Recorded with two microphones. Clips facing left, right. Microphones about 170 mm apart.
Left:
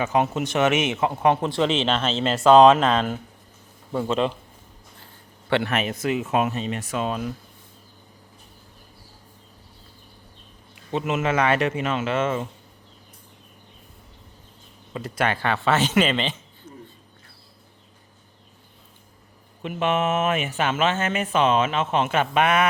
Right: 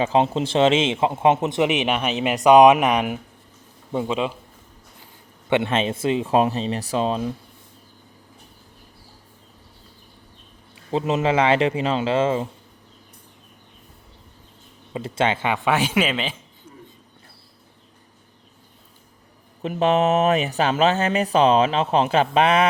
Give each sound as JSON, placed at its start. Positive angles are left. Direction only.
{"t": 0.0, "sound": "speech", "side_deg": -30}
{"t": 5.5, "sound": "speech", "side_deg": -20}
{"t": 10.9, "sound": "speech", "side_deg": -35}
{"t": 14.9, "sound": "speech", "side_deg": -25}
{"t": 16.7, "sound": "a sound", "side_deg": -10}
{"t": 19.6, "sound": "speech", "side_deg": -35}